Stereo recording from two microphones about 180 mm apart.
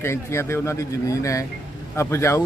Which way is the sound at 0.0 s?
15° left (ahead or behind).